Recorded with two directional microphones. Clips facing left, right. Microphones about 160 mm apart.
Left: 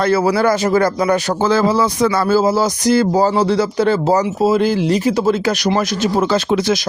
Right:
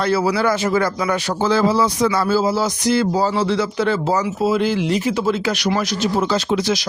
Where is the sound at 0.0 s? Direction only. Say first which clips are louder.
Left 3 dB; 50° left (ahead or behind).